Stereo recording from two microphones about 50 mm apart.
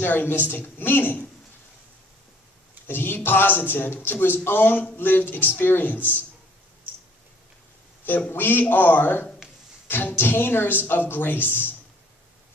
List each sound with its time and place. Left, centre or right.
0.0 s speech: left
2.9 s speech: left
8.3 s speech: left